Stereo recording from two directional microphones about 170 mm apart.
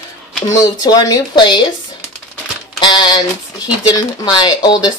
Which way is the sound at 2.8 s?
25° left (ahead or behind).